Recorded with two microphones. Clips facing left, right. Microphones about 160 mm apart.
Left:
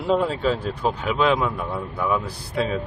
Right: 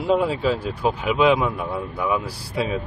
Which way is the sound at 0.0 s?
5° right (ahead or behind).